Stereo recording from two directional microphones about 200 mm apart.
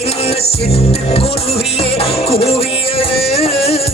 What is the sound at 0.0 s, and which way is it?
Music, 30° left (ahead or behind).